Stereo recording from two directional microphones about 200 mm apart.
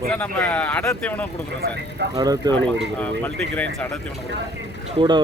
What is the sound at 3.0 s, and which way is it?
Speech, 10° left (ahead or behind).